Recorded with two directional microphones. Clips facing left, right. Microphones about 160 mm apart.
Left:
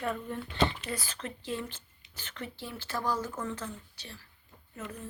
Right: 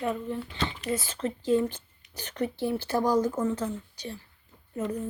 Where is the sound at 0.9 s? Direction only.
25° right (ahead or behind).